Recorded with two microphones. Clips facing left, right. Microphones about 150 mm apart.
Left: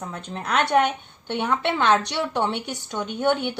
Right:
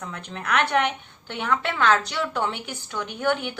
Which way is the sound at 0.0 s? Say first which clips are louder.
Left 2 dB; 30° left (ahead or behind).